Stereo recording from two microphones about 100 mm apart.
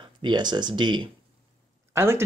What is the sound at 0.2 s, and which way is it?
Speech, 50° right (ahead or behind).